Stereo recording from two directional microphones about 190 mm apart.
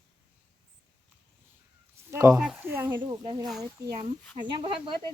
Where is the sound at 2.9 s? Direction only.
25° right (ahead or behind).